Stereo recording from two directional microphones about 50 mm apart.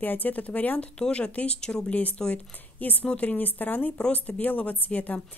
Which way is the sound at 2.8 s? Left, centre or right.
Left.